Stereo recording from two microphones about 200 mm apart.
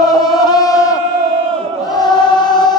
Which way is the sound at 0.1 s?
20° left (ahead or behind).